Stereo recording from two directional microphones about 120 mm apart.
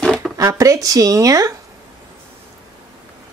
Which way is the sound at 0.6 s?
30° right (ahead or behind).